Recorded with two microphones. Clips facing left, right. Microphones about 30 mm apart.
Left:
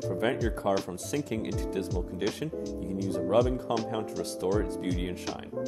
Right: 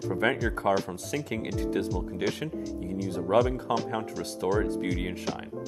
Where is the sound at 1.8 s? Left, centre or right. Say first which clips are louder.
Right 3 dB; right.